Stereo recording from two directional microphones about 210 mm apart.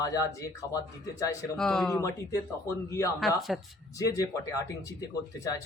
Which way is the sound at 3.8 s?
15° left (ahead or behind).